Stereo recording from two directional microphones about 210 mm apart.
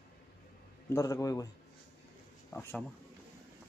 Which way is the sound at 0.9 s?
15° left (ahead or behind).